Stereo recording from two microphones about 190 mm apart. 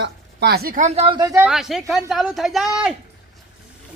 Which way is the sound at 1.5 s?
Centre (ahead or behind).